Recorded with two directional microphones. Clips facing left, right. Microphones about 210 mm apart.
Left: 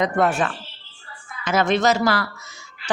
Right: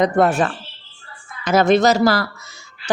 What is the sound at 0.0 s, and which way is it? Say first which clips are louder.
Speech: right 4 dB; 35° right (ahead or behind).